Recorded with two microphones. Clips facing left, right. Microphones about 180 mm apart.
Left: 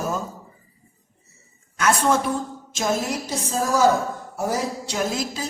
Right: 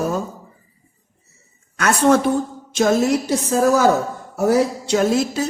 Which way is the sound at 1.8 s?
70° right (ahead or behind).